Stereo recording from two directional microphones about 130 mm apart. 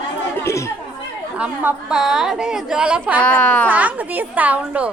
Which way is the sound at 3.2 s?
10° left (ahead or behind).